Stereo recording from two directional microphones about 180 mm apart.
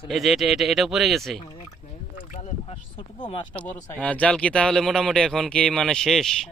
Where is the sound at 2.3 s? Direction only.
35° left (ahead or behind).